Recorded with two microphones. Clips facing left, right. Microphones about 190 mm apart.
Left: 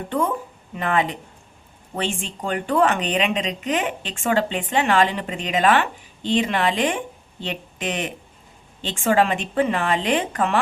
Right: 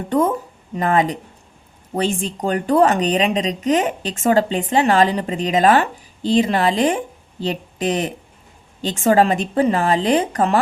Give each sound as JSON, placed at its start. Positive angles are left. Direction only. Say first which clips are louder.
{"t": 0.1, "sound": "speech", "louder": "right 6 dB", "side_deg": -40}